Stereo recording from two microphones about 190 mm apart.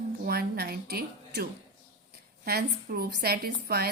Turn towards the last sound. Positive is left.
turn(degrees=-55)  # may be behind; listen again after turning